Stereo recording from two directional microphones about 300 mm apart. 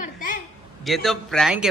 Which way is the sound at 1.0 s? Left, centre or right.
Centre.